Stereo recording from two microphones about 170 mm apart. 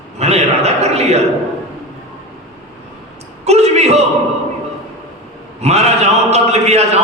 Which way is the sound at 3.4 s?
40° right (ahead or behind).